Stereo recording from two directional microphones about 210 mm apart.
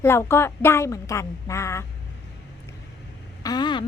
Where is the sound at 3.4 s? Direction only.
20° left (ahead or behind).